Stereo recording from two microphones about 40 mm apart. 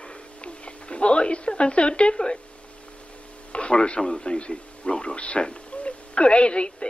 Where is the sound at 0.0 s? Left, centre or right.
Left.